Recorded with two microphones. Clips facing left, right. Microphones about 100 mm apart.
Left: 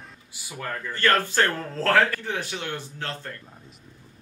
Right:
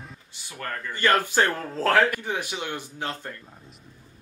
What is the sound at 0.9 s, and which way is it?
A man's voice, 15° right (ahead or behind).